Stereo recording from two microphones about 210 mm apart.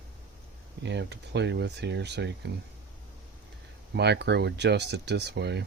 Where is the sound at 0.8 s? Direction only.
55° right (ahead or behind).